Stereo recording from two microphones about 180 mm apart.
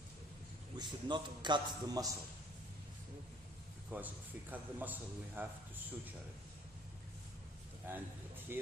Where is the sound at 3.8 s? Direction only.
10° right (ahead or behind).